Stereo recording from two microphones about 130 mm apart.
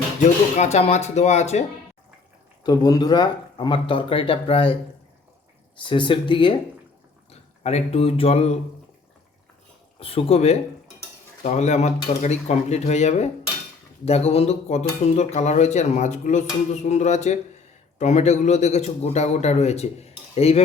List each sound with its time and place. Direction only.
0.5 s a man's voice: 60° left (ahead or behind)
2.6 s speech: 30° left (ahead or behind)
5.8 s speech: 40° left (ahead or behind)
7.3 s speech: 55° left (ahead or behind)
10.0 s a man's voice: 45° left (ahead or behind)